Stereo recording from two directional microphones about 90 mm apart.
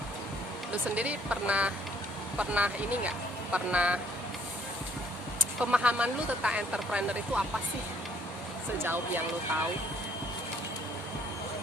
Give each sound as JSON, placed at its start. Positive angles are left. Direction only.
{"t": 0.7, "sound": "speech", "side_deg": -15}
{"t": 5.4, "sound": "speech", "side_deg": -15}
{"t": 8.8, "sound": "speech", "side_deg": -20}